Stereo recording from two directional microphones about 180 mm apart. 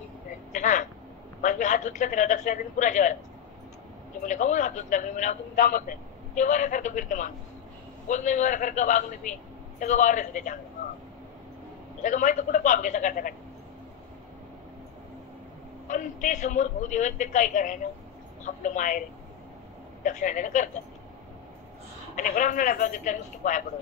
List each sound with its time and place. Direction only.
0.5 s a sound: 45° left (ahead or behind)
1.4 s a man's voice: 45° left (ahead or behind)
4.2 s a man's voice: 45° left (ahead or behind)
12.0 s a man's voice: 45° left (ahead or behind)
15.9 s a man's voice: 45° left (ahead or behind)
22.1 s a man's voice: 45° left (ahead or behind)